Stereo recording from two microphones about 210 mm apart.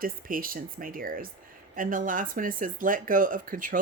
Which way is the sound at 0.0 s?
45° right (ahead or behind).